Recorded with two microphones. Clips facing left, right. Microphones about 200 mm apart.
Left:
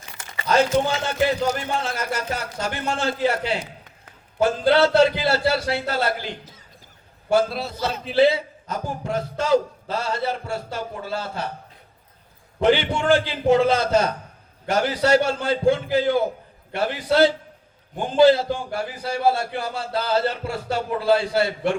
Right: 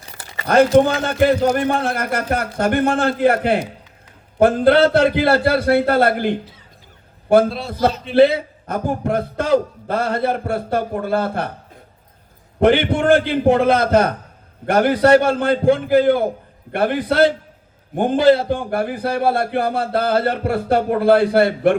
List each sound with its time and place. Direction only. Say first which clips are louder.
0.0 s a sound: right 2 dB; 35° right (ahead or behind)
0.4 s a man's voice: right 7 dB; 55° right (ahead or behind)
12.5 s a man's voice: right 5 dB; 55° right (ahead or behind)